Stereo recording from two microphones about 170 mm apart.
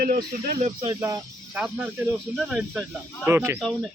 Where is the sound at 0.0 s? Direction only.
60° right (ahead or behind).